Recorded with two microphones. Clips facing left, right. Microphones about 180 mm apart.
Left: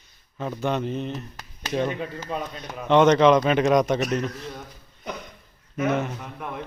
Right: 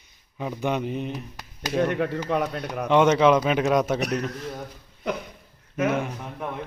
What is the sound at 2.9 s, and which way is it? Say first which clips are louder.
Speech: left 2 dB; 5° right (ahead or behind).